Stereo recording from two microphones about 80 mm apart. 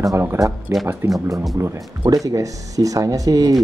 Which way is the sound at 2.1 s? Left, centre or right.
Right.